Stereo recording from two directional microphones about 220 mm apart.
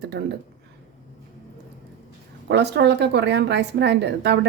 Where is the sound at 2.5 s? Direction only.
50° right (ahead or behind).